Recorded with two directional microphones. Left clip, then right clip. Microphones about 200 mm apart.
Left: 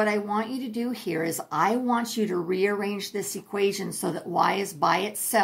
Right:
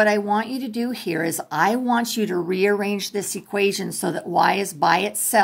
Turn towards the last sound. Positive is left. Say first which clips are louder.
# right 6 dB
turn(degrees=-35)  # may be behind; listen again after turning